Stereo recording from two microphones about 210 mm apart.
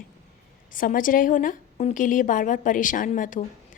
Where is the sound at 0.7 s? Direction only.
40° left (ahead or behind).